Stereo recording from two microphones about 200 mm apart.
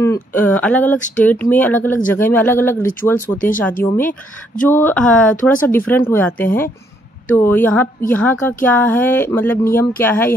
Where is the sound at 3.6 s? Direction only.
10° left (ahead or behind).